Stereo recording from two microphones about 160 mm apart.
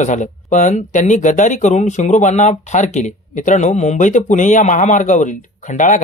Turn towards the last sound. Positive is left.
turn(degrees=50)  # may be behind; listen again after turning